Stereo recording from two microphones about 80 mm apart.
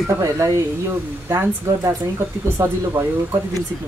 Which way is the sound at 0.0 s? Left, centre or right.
Right.